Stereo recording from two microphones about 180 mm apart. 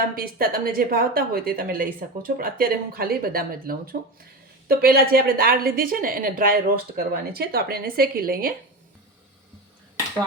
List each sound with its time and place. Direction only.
0.0 s a woman's voice: 55° right (ahead or behind)